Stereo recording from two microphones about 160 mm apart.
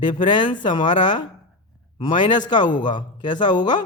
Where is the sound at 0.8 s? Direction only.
50° left (ahead or behind).